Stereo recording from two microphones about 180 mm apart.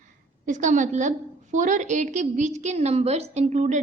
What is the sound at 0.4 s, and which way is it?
A woman's voice, 45° right (ahead or behind).